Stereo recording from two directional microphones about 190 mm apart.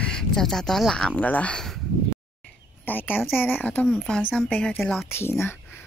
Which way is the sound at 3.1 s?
Centre (ahead or behind).